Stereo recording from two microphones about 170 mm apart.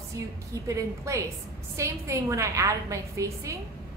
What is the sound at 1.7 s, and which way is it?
A woman's voice, 15° right (ahead or behind).